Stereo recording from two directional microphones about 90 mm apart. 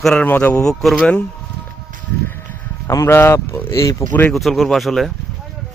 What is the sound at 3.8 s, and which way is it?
Speech, 40° left (ahead or behind).